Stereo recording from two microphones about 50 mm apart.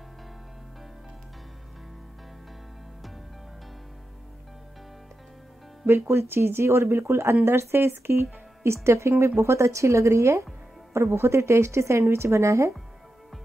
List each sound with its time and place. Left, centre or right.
5.9 s speech: right